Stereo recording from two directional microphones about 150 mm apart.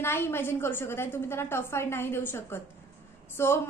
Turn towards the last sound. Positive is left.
turn(degrees=15)  # may be behind; listen again after turning